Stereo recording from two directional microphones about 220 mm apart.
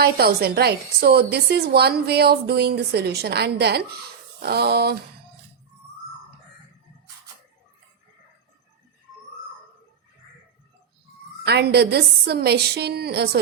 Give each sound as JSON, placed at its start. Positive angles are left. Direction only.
{"t": 0.0, "sound": "a woman's voice", "side_deg": -45}
{"t": 11.4, "sound": "a woman's voice", "side_deg": -50}